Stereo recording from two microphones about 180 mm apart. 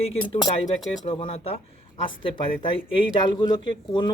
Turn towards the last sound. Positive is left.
turn(degrees=25)  # may be behind; listen again after turning